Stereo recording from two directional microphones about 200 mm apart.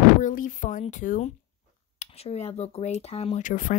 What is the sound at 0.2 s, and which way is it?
Speech, 40° left (ahead or behind).